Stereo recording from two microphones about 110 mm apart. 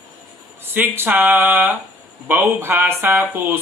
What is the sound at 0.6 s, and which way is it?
Speech, 20° right (ahead or behind).